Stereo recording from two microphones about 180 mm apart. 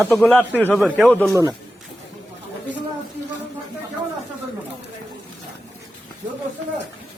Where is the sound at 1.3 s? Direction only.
20° right (ahead or behind).